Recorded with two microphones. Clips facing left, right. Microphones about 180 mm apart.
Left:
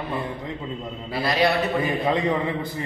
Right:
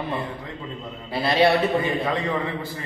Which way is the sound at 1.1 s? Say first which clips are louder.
Right 3 dB; 25° right (ahead or behind).